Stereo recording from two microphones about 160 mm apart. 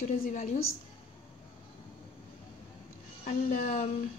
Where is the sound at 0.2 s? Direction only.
50° left (ahead or behind).